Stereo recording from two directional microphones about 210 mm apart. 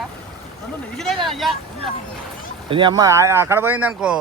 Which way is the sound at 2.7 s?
25° right (ahead or behind).